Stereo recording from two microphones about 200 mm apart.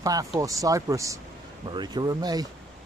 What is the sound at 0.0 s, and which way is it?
Speech, 15° right (ahead or behind).